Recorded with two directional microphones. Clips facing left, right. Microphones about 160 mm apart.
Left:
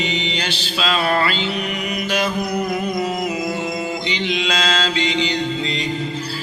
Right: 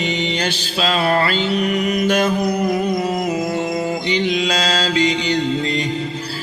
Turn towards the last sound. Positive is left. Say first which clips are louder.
# right 4 dB
turn(degrees=-45)  # may be behind; listen again after turning